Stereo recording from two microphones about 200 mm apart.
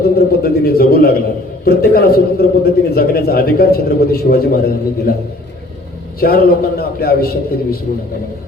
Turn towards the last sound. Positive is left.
turn(degrees=50)  # may be behind; listen again after turning